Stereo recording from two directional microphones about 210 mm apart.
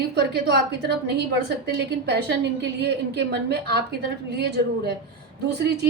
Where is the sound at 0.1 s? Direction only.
50° right (ahead or behind).